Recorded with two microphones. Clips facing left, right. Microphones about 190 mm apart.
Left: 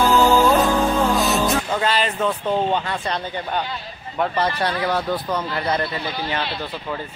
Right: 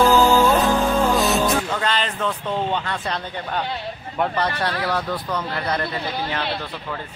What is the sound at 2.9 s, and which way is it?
Speech, centre (ahead or behind).